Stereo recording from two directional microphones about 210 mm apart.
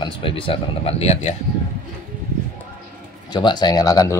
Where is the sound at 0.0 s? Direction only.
25° left (ahead or behind).